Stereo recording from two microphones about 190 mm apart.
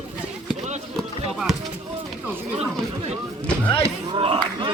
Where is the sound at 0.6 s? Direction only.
35° right (ahead or behind).